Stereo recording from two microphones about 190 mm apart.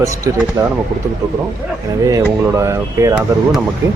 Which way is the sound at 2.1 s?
15° right (ahead or behind).